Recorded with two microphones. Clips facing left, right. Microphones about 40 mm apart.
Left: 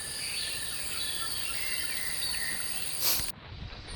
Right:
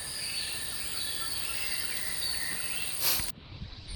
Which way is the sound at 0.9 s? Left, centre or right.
Left.